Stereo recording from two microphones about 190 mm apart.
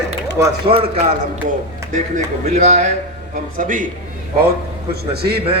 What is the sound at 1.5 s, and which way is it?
Speech, 40° right (ahead or behind).